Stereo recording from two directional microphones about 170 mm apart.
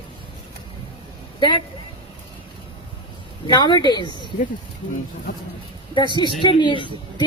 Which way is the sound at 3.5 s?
25° left (ahead or behind).